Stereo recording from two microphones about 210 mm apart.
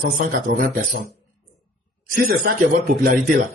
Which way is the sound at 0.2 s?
45° right (ahead or behind).